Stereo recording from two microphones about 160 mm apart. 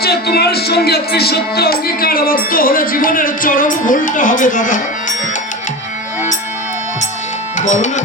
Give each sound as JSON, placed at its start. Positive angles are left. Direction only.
{"t": 0.0, "sound": "speech", "side_deg": 80}
{"t": 7.6, "sound": "speech", "side_deg": 50}